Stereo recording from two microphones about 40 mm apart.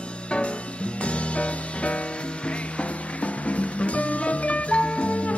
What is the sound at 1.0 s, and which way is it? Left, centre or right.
Music, left.